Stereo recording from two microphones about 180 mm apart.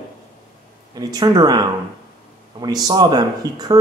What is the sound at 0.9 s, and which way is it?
Speech, 20° right (ahead or behind).